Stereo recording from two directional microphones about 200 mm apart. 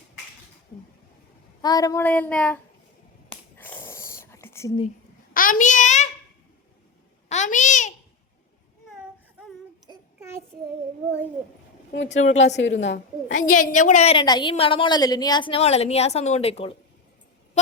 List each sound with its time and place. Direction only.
1.6 s child singing: 20° left (ahead or behind)
3.6 s whispering: 10° left (ahead or behind)
5.3 s a sound: 45° left (ahead or behind)
7.3 s a sound: 35° left (ahead or behind)
9.9 s child singing: 20° right (ahead or behind)
12.0 s a woman's voice: 35° left (ahead or behind)
12.5 s a woman's voice: 65° left (ahead or behind)
13.5 s a woman's voice: 40° left (ahead or behind)